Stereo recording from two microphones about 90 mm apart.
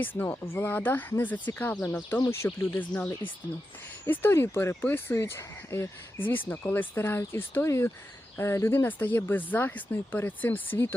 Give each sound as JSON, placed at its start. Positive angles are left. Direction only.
{"t": 0.0, "sound": "speech", "side_deg": 20}
{"t": 2.2, "sound": "speech", "side_deg": 30}